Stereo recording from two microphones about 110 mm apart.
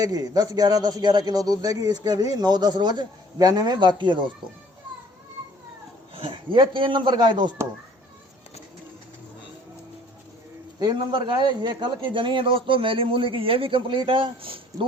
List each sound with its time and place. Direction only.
0.0 s a man's voice: 35° right (ahead or behind)
6.1 s a man's voice: 50° right (ahead or behind)
10.8 s a man's voice: 40° right (ahead or behind)